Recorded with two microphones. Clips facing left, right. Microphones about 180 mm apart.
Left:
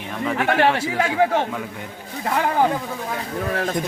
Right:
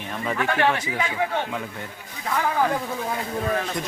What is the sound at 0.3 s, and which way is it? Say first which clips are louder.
Speech: left 5 dB; 75° left (ahead or behind).